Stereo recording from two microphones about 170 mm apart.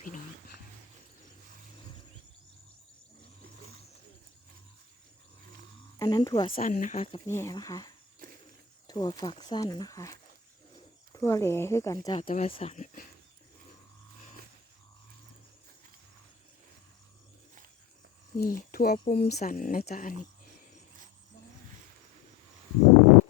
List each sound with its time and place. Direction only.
6.0 s speech: 20° left (ahead or behind)
6.5 s speech: 50° left (ahead or behind)
7.3 s speech: 15° left (ahead or behind); by 13.1 s 45° left (ahead or behind)
18.3 s speech: 60° left (ahead or behind)
19.1 s speech: 70° left (ahead or behind)
19.4 s speech: 50° left (ahead or behind)